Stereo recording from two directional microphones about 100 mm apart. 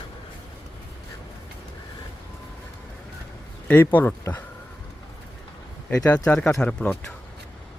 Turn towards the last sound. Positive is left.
turn(degrees=10)  # may be behind; listen again after turning